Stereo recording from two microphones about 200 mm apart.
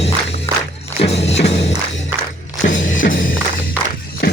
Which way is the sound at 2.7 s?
45° left (ahead or behind).